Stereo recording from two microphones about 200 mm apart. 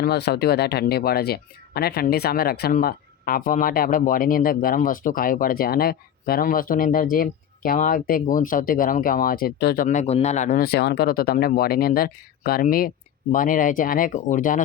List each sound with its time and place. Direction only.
0.0 s speech: 55° left (ahead or behind)